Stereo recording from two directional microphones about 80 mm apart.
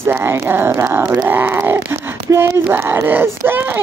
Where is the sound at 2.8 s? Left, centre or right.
Right.